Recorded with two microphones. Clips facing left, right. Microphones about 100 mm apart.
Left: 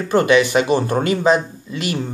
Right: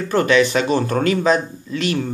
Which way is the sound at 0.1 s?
15° left (ahead or behind).